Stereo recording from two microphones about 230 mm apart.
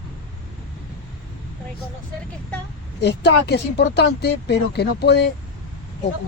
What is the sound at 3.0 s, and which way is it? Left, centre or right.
Speech, left.